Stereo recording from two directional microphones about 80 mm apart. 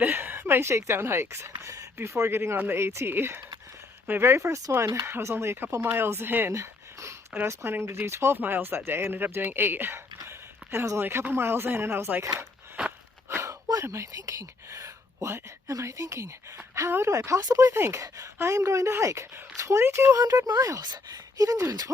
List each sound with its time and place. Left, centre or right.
0.0 s a woman's voice: right
6.5 s a sound: right
7.4 s a woman's voice: right
13.3 s a sound: right
13.8 s a woman's voice: right
20.8 s speech: right